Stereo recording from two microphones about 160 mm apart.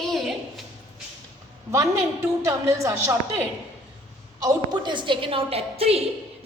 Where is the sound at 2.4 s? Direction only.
20° right (ahead or behind).